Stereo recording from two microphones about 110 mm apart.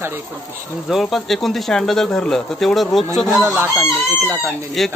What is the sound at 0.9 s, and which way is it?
Speech, centre (ahead or behind).